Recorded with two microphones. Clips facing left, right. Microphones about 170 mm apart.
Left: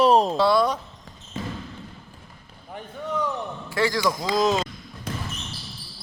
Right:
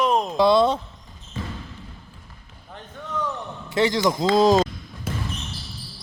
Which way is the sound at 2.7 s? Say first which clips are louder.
Left 3 dB; 10° left (ahead or behind).